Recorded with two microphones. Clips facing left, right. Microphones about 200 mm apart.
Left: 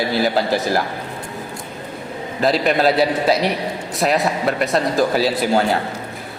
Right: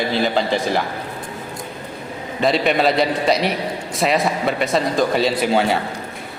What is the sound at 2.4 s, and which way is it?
A man's voice, centre (ahead or behind).